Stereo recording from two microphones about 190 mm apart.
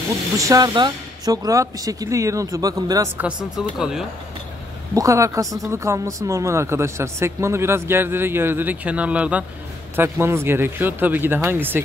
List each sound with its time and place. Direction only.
0.4 s a woman's voice: 20° right (ahead or behind)
3.3 s speech: 5° right (ahead or behind)
4.9 s a woman's voice: 15° right (ahead or behind)